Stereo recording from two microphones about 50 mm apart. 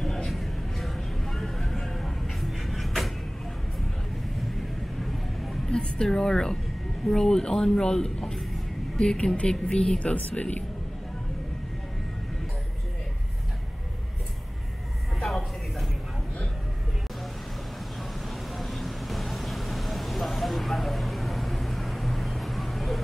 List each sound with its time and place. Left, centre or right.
0.0 s vehicle: centre
5.7 s a woman's voice: centre
15.1 s a sound: centre
18.2 s vehicle: centre